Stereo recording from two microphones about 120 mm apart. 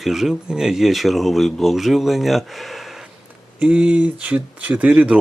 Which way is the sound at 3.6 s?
10° right (ahead or behind).